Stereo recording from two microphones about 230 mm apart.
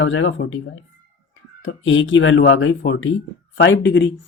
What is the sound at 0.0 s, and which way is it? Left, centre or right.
Speech, left.